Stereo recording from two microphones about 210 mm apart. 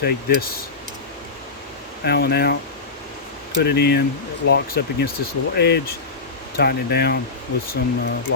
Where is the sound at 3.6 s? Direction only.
50° left (ahead or behind).